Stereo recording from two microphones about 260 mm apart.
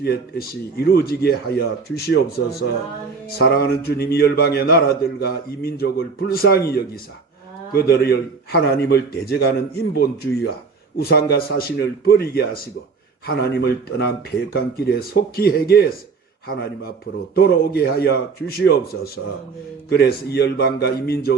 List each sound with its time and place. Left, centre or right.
0.0 s a man's voice: left
17.3 s a man's voice: left